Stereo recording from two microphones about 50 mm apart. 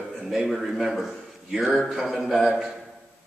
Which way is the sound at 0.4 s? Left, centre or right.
Centre.